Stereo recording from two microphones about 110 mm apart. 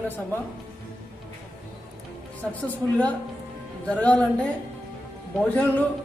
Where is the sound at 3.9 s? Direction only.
10° left (ahead or behind).